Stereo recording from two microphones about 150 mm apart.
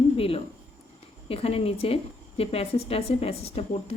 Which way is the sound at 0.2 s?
40° left (ahead or behind).